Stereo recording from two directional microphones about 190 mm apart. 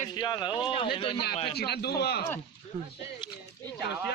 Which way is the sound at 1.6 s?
60° left (ahead or behind).